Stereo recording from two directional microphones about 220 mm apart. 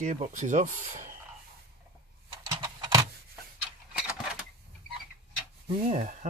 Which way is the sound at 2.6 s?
20° right (ahead or behind).